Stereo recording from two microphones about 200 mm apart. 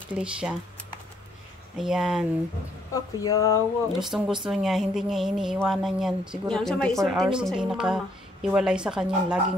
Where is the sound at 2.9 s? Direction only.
20° left (ahead or behind).